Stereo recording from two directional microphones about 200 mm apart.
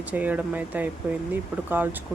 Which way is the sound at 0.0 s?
10° right (ahead or behind).